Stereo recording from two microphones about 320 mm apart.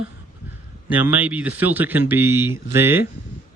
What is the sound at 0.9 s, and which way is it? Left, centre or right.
Speech, centre.